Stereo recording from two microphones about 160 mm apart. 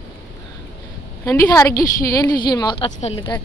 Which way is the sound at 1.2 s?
20° left (ahead or behind).